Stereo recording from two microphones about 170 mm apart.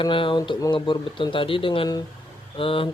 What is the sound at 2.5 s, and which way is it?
Mantra, 30° left (ahead or behind).